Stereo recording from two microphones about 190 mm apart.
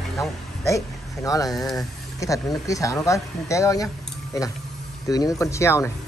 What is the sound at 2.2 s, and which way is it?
Speech, 15° left (ahead or behind).